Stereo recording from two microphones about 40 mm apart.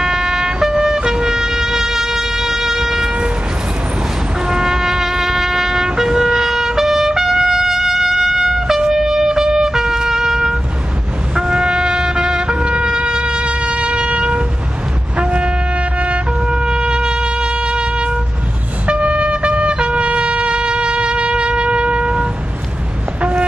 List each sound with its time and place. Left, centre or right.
0.0 s music: centre
4.4 s music: centre
11.3 s trumpet: centre
15.1 s vehicle: right
16.4 s wind instrument: right
18.9 s trumpet: right